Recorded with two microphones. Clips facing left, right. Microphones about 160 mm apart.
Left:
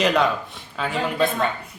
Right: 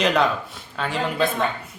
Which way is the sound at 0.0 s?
Centre (ahead or behind).